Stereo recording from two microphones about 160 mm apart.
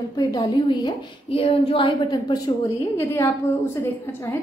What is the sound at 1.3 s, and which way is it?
A woman's voice, 35° left (ahead or behind).